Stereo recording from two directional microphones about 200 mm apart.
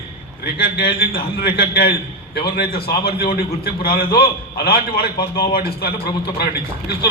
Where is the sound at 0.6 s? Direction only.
50° left (ahead or behind).